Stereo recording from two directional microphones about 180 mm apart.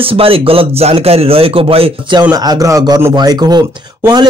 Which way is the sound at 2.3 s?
20° right (ahead or behind).